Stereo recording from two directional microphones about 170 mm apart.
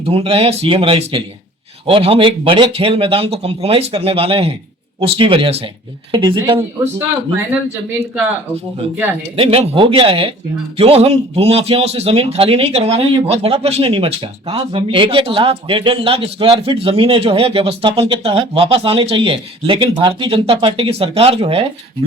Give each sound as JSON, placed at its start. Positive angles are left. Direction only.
{"t": 0.0, "sound": "a man's voice", "side_deg": -35}
{"t": 9.3, "sound": "a man's voice", "side_deg": -35}